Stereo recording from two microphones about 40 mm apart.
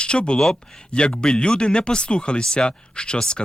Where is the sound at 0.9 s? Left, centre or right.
Left.